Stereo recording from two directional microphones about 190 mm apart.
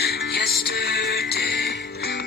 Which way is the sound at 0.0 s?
60° left (ahead or behind).